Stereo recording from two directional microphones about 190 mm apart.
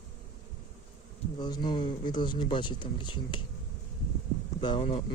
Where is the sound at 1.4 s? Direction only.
25° left (ahead or behind).